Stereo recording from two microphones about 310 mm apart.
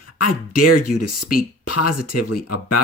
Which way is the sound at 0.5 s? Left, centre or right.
Left.